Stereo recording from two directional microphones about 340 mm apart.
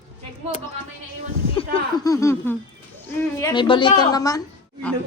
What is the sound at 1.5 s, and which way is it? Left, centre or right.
A woman's voice, centre.